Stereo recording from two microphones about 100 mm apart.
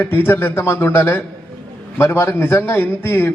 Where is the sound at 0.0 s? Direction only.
20° left (ahead or behind).